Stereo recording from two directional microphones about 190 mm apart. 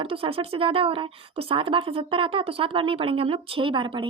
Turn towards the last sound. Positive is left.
turn(degrees=-25)  # may be behind; listen again after turning